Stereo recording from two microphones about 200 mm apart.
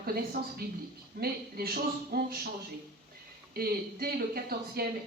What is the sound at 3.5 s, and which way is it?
A man's voice, 50° right (ahead or behind).